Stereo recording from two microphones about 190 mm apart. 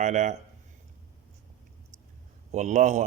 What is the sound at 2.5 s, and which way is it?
Speech, 40° right (ahead or behind).